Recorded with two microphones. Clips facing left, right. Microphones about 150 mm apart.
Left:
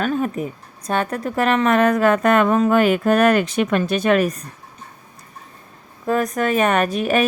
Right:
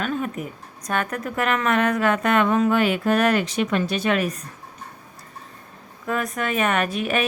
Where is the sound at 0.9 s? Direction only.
30° left (ahead or behind).